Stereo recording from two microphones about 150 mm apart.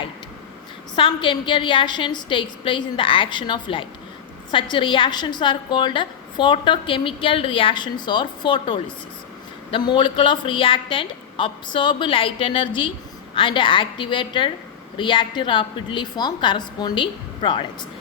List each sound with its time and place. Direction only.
0.9 s a woman's voice: 35° left (ahead or behind)